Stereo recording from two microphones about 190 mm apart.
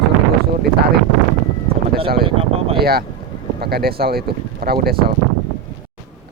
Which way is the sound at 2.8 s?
55° right (ahead or behind).